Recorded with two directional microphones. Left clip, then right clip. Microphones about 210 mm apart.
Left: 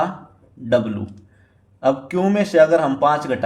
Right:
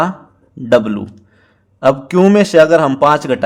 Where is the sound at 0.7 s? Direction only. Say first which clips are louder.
Right 7 dB; 45° right (ahead or behind).